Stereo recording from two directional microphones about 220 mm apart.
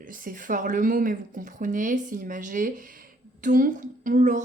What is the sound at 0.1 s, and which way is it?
A woman's voice, 35° right (ahead or behind).